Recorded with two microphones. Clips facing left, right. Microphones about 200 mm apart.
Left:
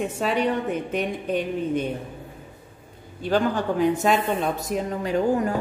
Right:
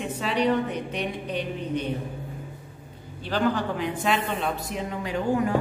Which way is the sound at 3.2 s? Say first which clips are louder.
Left 3 dB; 45° left (ahead or behind).